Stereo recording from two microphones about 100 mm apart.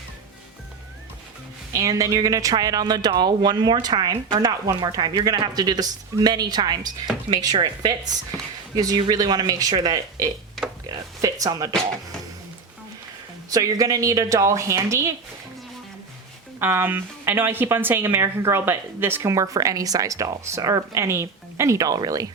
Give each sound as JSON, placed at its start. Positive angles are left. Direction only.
{"t": 1.7, "sound": "a woman's voice", "side_deg": -35}
{"t": 13.5, "sound": "a woman's voice", "side_deg": -35}
{"t": 16.6, "sound": "speech", "side_deg": -25}